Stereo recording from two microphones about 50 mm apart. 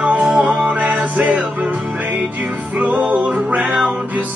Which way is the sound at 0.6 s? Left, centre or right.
Right.